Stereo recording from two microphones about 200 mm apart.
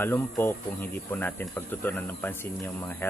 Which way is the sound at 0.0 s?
10° left (ahead or behind).